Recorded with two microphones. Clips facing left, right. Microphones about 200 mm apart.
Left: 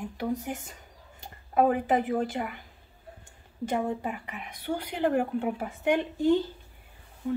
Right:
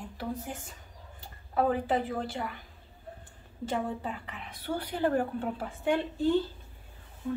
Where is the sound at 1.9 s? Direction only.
15° left (ahead or behind).